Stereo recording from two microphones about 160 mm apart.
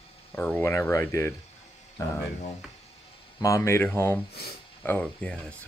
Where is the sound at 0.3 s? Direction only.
15° left (ahead or behind).